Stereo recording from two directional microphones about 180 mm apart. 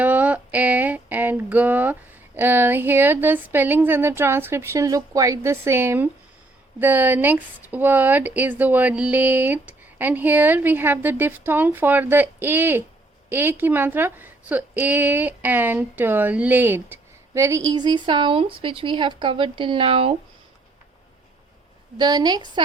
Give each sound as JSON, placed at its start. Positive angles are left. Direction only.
{"t": 0.0, "sound": "a sound", "side_deg": -10}
{"t": 6.7, "sound": "a woman's voice", "side_deg": -10}
{"t": 21.9, "sound": "a woman's voice", "side_deg": -25}